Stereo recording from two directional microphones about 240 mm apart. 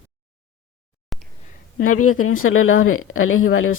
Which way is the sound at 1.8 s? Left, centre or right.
Left.